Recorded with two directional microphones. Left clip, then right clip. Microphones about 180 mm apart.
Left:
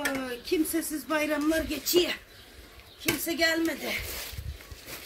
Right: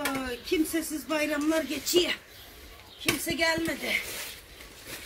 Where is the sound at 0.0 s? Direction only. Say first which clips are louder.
Even; 5° left (ahead or behind).